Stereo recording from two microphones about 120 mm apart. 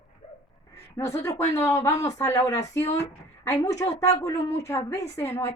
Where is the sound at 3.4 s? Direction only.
25° left (ahead or behind).